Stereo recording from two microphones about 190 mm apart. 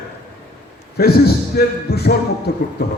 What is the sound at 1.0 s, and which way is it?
Speech, 55° left (ahead or behind).